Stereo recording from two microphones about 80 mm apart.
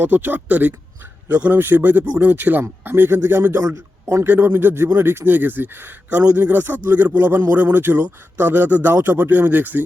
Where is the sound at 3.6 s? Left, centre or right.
Right.